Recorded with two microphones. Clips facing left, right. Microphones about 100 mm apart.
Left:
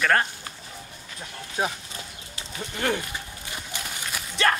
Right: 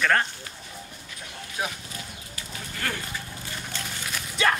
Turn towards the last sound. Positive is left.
turn(degrees=-5)  # may be behind; listen again after turning